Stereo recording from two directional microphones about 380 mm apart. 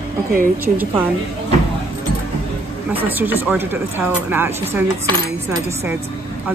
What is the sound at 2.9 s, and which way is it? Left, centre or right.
A woman's voice, centre.